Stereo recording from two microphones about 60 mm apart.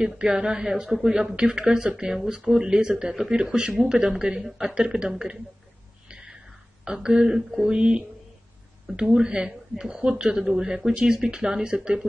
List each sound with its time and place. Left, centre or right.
0.0 s speech: centre
6.0 s a sound: centre
6.8 s speech: centre
7.7 s speech: centre